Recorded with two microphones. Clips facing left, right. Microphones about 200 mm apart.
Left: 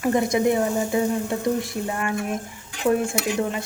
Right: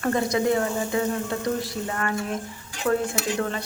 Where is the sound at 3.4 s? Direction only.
15° left (ahead or behind).